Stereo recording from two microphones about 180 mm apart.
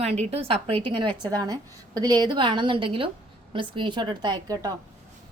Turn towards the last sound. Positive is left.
turn(degrees=-25)  # may be behind; listen again after turning